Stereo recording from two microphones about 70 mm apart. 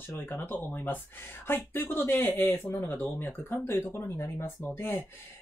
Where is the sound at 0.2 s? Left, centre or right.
Left.